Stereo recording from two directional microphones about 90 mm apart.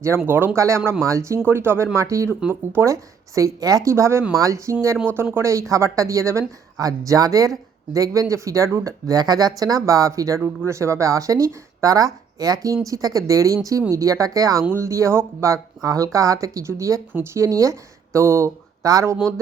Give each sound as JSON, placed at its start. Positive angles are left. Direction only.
{"t": 0.3, "sound": "speech", "side_deg": -25}
{"t": 15.8, "sound": "speech", "side_deg": -40}